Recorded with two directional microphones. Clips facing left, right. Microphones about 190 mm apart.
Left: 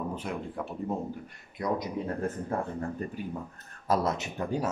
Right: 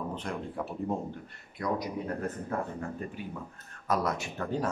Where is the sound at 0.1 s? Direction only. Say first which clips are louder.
Left 1 dB; 5° left (ahead or behind).